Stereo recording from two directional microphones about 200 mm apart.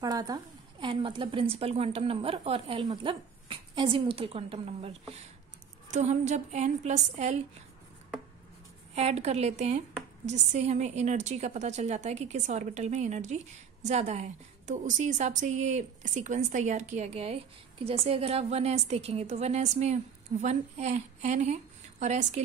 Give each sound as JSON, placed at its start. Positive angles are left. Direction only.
{"t": 0.0, "sound": "a woman's voice", "side_deg": -20}
{"t": 8.9, "sound": "a woman's voice", "side_deg": -30}